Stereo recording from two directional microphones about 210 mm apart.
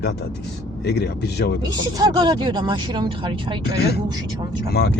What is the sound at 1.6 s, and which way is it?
Speech, 20° right (ahead or behind).